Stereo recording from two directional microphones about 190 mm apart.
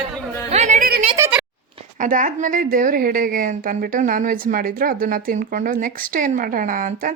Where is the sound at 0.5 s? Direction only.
40° right (ahead or behind).